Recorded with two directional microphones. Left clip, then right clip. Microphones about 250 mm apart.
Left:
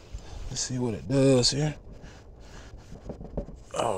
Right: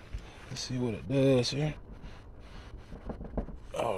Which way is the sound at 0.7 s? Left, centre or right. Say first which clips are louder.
Left 2 dB; centre.